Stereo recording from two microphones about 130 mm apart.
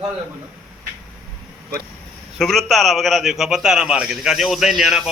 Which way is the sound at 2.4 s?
5° left (ahead or behind).